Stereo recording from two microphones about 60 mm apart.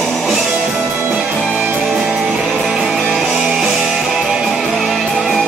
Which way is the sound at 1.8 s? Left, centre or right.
Centre.